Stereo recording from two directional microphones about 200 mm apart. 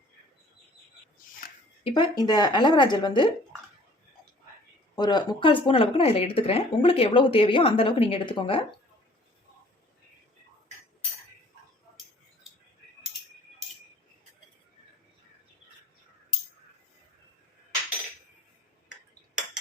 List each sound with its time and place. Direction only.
1.4 s a sound: 45° left (ahead or behind)
1.8 s speech: 20° left (ahead or behind)
4.9 s speech: 20° left (ahead or behind)